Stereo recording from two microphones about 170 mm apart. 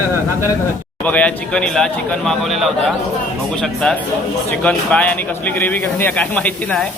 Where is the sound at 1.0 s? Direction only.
10° left (ahead or behind).